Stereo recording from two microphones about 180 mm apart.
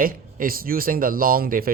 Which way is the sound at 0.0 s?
50° right (ahead or behind).